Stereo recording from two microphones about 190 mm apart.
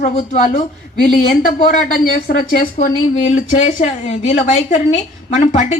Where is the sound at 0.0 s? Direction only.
40° left (ahead or behind).